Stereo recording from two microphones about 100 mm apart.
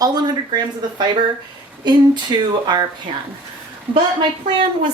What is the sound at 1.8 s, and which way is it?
Speech, 45° right (ahead or behind).